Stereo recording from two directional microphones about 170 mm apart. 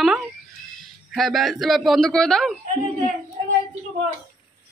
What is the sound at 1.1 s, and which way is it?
Speech, centre (ahead or behind).